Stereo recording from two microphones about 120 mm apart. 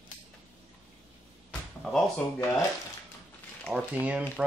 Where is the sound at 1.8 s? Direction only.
5° left (ahead or behind).